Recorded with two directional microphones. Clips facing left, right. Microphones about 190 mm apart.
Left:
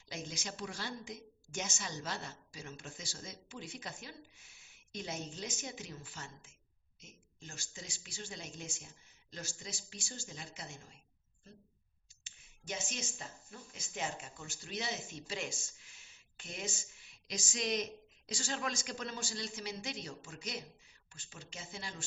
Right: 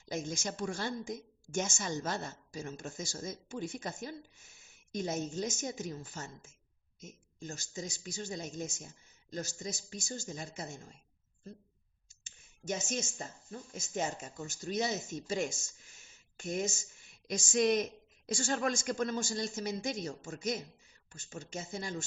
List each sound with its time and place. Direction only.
0.0 s a woman's voice: 45° right (ahead or behind)
12.2 s a woman's voice: 45° right (ahead or behind)